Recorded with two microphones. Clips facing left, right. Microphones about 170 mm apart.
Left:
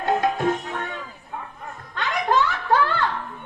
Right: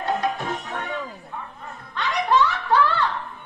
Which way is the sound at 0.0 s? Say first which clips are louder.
Left 4 dB; 50° left (ahead or behind).